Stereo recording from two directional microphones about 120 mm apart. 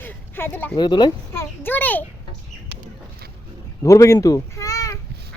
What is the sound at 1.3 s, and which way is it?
Speech, 20° left (ahead or behind).